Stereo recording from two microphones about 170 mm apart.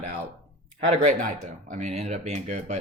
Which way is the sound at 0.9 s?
45° right (ahead or behind).